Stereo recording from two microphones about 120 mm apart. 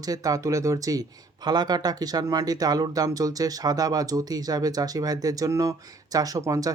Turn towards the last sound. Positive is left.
turn(degrees=-30)  # may be behind; listen again after turning